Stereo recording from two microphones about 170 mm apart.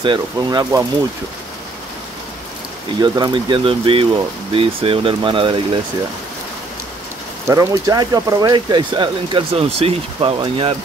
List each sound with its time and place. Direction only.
0.0 s speech: 25° right (ahead or behind)
3.0 s speech: 25° right (ahead or behind)
7.4 s speech: 20° right (ahead or behind)